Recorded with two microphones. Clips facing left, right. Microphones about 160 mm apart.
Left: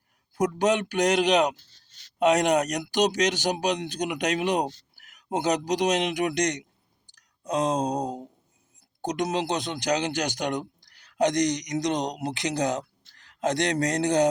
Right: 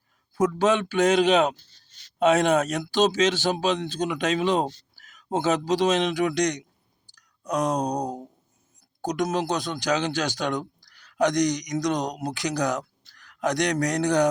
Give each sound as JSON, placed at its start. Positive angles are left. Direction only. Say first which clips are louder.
{"t": 0.6, "sound": "speech", "louder": "right 2 dB", "side_deg": 15}